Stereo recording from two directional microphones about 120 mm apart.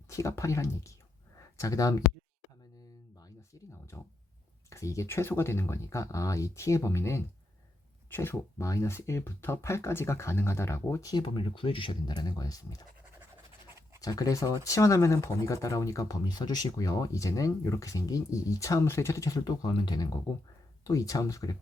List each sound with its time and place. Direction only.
0.1 s speech: 25° left (ahead or behind)
3.2 s a sound: 30° left (ahead or behind)
4.7 s speech: 25° left (ahead or behind)
14.0 s speech: 30° left (ahead or behind)